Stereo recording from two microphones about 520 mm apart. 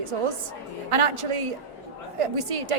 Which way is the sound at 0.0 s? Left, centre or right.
Right.